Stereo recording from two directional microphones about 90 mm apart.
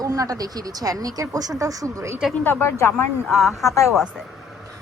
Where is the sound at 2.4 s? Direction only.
25° left (ahead or behind).